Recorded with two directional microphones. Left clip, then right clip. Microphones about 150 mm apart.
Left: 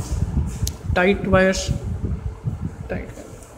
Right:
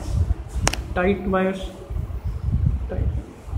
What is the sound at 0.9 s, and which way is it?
Speech, 25° left (ahead or behind).